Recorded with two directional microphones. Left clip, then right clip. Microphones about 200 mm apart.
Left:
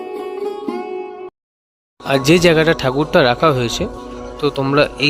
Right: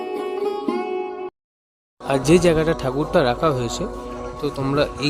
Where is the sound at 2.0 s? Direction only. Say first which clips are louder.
Left 4 dB; centre (ahead or behind).